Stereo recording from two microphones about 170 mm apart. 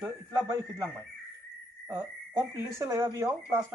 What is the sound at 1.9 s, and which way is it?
Speech, 20° right (ahead or behind).